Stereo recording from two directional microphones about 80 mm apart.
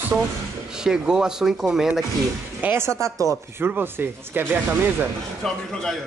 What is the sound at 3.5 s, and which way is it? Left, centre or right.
Speech, right.